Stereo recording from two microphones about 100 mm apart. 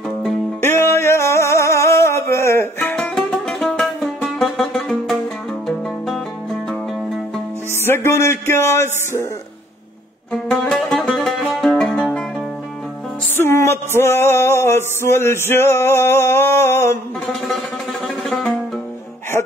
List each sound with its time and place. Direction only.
0.6 s music: 25° left (ahead or behind)
3.0 s music: 5° left (ahead or behind)
7.8 s a sound: 25° left (ahead or behind)
10.3 s music: 10° left (ahead or behind)
13.4 s a sound: 25° left (ahead or behind)
18.0 s music: 5° left (ahead or behind)